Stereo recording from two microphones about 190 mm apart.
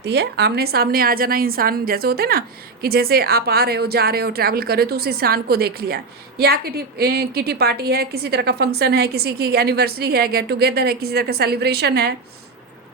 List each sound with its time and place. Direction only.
0.0 s a woman's voice: 60° right (ahead or behind)